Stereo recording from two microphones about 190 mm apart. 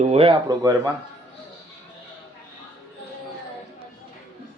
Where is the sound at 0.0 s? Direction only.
30° right (ahead or behind).